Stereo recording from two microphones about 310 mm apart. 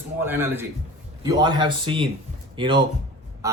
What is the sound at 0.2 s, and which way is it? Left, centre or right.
Speech, centre.